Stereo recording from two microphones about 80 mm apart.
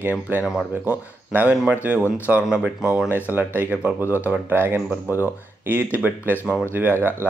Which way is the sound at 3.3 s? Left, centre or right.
Right.